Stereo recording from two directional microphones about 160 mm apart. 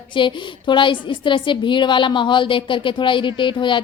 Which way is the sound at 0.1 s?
30° left (ahead or behind).